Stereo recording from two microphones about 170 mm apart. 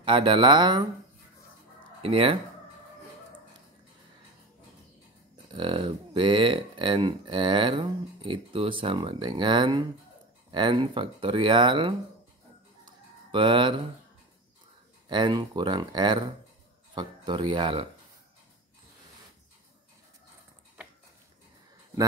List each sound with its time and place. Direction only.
0.0 s speech: 30° right (ahead or behind)
2.0 s speech: 35° right (ahead or behind)
5.5 s speech: 30° right (ahead or behind)
13.3 s speech: 30° right (ahead or behind)
15.0 s speech: 25° right (ahead or behind)